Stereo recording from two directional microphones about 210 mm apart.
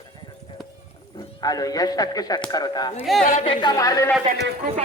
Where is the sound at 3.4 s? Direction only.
20° left (ahead or behind).